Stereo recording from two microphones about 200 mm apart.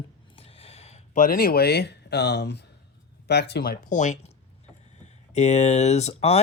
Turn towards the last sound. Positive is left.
turn(degrees=30)  # may be behind; listen again after turning